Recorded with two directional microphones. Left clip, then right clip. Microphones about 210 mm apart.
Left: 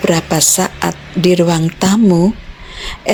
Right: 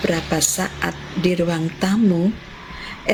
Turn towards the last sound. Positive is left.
turn(degrees=45)  # may be behind; listen again after turning